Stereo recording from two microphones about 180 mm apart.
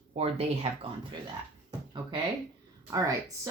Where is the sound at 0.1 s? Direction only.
35° right (ahead or behind).